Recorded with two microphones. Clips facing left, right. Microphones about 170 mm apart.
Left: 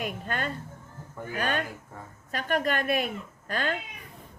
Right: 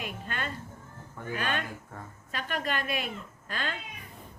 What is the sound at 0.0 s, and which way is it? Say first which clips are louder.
A woman's voice: left 5 dB; 45° left (ahead or behind).